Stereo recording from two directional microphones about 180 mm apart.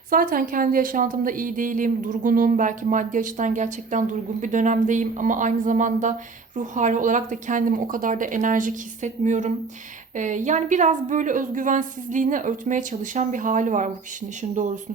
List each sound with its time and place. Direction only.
0.1 s a woman's voice: 50° right (ahead or behind)